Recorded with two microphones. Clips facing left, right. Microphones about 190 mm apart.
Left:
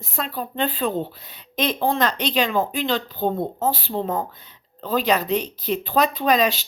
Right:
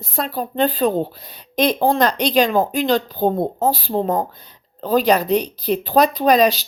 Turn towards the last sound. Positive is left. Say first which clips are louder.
# right 5 dB
turn(degrees=-40)  # may be behind; listen again after turning